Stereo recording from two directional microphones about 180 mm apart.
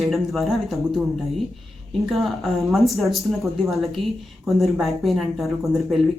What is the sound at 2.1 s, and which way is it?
Speech, centre (ahead or behind).